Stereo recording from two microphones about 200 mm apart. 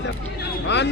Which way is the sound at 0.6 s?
60° left (ahead or behind).